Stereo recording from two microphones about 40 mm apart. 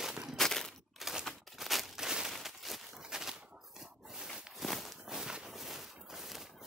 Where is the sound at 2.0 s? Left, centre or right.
Centre.